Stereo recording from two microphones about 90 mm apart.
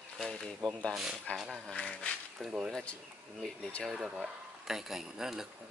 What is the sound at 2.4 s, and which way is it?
Speech, 10° right (ahead or behind).